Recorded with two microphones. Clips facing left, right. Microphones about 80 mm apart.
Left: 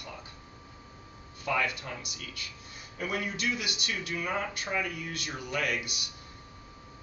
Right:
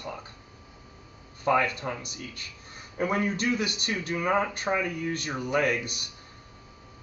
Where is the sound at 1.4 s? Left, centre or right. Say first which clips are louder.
Right 6 dB; right.